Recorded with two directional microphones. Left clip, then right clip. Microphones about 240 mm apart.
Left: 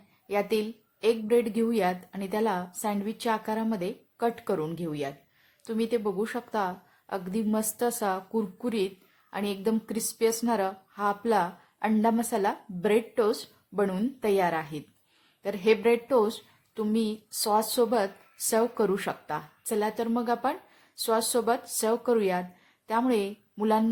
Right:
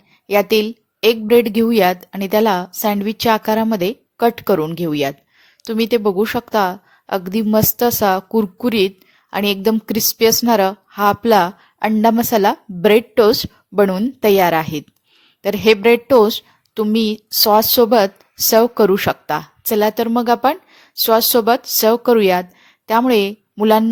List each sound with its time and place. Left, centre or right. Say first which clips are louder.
0.3 s a woman's voice: right 13 dB; right